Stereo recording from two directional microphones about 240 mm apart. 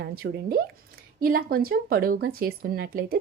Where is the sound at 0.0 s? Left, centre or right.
Right.